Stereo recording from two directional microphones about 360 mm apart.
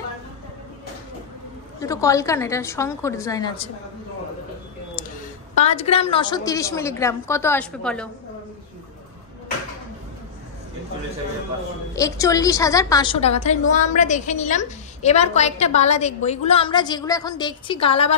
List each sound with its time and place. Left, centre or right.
1.8 s a woman's voice: centre
5.5 s a woman's voice: centre
11.9 s a woman's voice: centre